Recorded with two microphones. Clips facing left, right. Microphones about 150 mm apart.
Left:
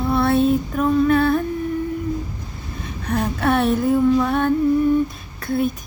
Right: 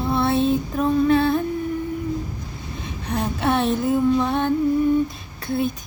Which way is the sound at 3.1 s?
25° right (ahead or behind).